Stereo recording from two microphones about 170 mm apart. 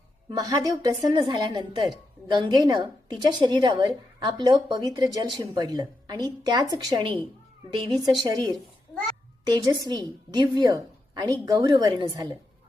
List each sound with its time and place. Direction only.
0.3 s a woman's voice: 20° right (ahead or behind)
8.2 s a woman's voice: 25° right (ahead or behind)